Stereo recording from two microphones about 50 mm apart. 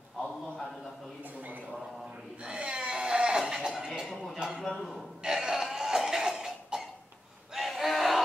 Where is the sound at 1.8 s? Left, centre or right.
Centre.